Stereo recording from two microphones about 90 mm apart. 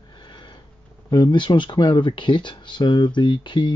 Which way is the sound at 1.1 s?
60° left (ahead or behind).